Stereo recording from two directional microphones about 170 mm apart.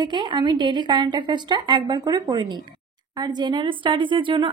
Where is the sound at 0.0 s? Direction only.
25° right (ahead or behind).